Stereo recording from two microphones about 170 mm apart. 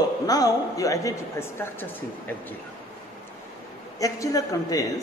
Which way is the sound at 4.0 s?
20° left (ahead or behind).